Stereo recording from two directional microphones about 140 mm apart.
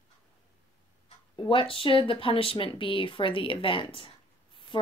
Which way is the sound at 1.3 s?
35° left (ahead or behind).